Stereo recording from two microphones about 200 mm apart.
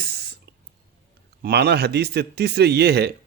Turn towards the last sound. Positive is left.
turn(degrees=-55)  # may be behind; listen again after turning